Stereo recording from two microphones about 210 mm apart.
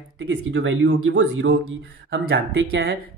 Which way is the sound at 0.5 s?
60° right (ahead or behind).